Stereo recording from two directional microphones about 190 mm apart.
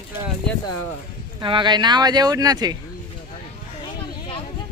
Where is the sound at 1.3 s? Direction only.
25° right (ahead or behind).